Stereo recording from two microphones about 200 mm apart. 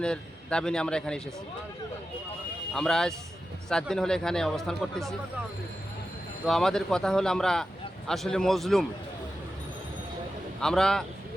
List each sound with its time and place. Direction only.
0.0 s speech: 5° left (ahead or behind)
2.7 s speech: centre (ahead or behind)
6.4 s speech: centre (ahead or behind)
10.6 s speech: 5° left (ahead or behind)